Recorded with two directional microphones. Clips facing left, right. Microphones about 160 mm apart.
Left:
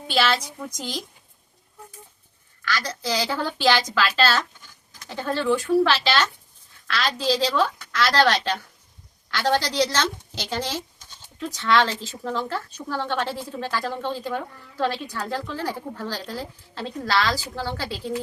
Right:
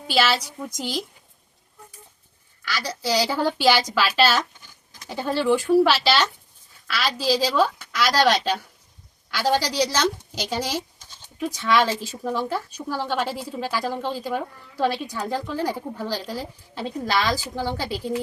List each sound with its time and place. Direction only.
0.1 s speech: 5° right (ahead or behind)
2.6 s speech: 10° right (ahead or behind)